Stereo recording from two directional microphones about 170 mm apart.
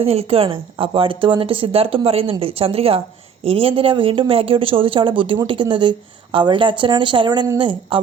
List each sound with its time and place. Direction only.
0.0 s a woman's voice: 35° right (ahead or behind)